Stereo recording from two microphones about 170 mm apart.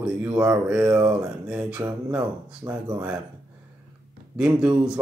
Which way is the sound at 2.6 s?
20° right (ahead or behind).